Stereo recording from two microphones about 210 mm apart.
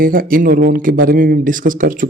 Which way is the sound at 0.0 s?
40° right (ahead or behind).